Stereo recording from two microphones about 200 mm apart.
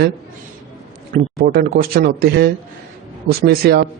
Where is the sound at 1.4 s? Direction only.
50° right (ahead or behind).